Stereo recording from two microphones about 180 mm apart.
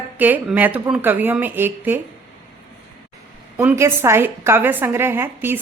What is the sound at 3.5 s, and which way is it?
A woman's voice, 15° right (ahead or behind).